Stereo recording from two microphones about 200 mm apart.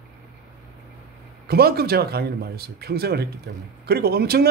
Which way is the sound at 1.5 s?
50° right (ahead or behind).